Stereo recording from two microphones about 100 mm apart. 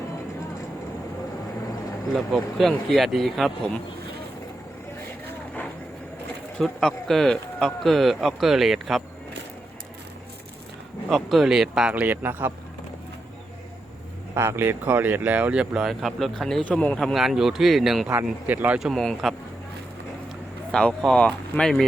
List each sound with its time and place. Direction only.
2.3 s speech: centre (ahead or behind)
6.6 s speech: 5° left (ahead or behind)
11.1 s speech: centre (ahead or behind); by 12.5 s 20° right (ahead or behind)
14.3 s speech: 25° right (ahead or behind); by 18.1 s 5° right (ahead or behind)
18.1 s speech: 15° right (ahead or behind)
18.8 s speech: centre (ahead or behind)
20.7 s speech: 5° left (ahead or behind)